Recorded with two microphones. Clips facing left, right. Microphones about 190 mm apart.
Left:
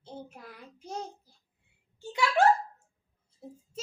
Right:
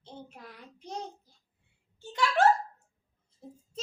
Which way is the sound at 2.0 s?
10° left (ahead or behind).